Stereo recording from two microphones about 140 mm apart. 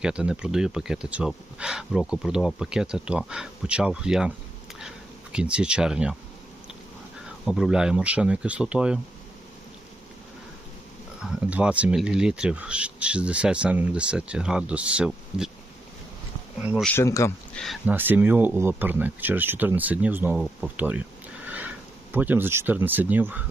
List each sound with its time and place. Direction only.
0.0 s speech: 5° right (ahead or behind)
5.3 s speech: 5° right (ahead or behind)
7.4 s speech: 5° right (ahead or behind)
11.2 s speech: 5° right (ahead or behind)
17.0 s speech: 20° left (ahead or behind)
17.5 s speech: centre (ahead or behind)
17.8 s speech: 15° right (ahead or behind)
20.4 s speech: centre (ahead or behind)
21.4 s sniff: 10° right (ahead or behind)
22.1 s speech: 15° right (ahead or behind)